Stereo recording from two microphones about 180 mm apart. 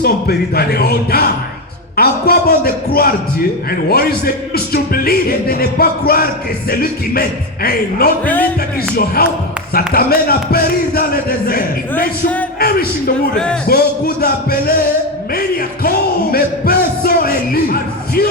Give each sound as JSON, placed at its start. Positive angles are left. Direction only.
{"t": 0.0, "sound": "speech", "side_deg": 60}
{"t": 8.2, "sound": "a man's voice", "side_deg": 10}
{"t": 9.0, "sound": "speech", "side_deg": 55}
{"t": 13.3, "sound": "speech", "side_deg": 5}
{"t": 13.7, "sound": "speech", "side_deg": 60}
{"t": 15.3, "sound": "music", "side_deg": 55}